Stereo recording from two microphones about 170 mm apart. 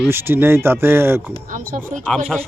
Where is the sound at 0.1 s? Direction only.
15° right (ahead or behind).